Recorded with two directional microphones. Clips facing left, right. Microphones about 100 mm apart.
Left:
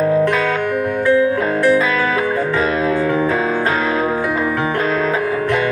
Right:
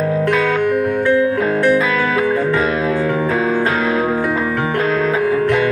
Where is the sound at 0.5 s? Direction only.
5° right (ahead or behind).